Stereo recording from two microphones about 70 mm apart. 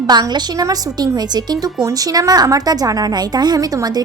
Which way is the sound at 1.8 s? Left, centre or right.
Right.